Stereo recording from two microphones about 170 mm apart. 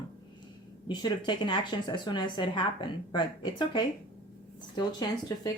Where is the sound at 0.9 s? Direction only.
25° left (ahead or behind).